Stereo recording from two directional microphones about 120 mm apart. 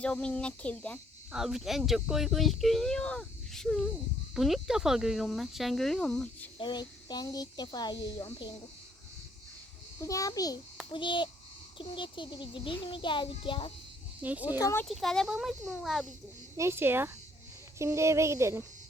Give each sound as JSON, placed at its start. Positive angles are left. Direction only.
{"t": 0.0, "sound": "speech", "side_deg": 10}
{"t": 1.3, "sound": "speech", "side_deg": -5}
{"t": 6.6, "sound": "speech", "side_deg": 40}
{"t": 10.0, "sound": "a child's voice", "side_deg": 30}
{"t": 10.9, "sound": "a child's voice", "side_deg": 40}
{"t": 14.2, "sound": "speech", "side_deg": -15}
{"t": 14.6, "sound": "a child's voice", "side_deg": 25}
{"t": 14.8, "sound": "speech", "side_deg": 5}
{"t": 16.6, "sound": "speech", "side_deg": -20}